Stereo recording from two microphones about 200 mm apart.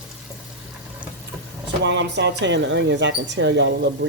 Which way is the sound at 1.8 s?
60° right (ahead or behind).